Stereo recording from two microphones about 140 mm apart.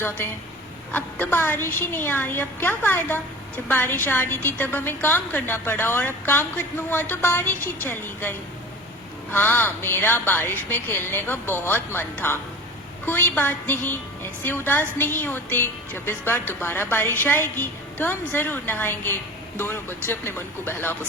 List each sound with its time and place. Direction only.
0.9 s a woman's voice: 15° left (ahead or behind)